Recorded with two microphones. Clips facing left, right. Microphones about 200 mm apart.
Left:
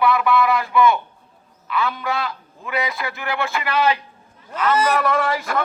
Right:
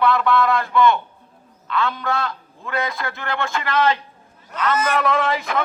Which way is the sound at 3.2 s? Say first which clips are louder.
Left 1 dB; 10° left (ahead or behind).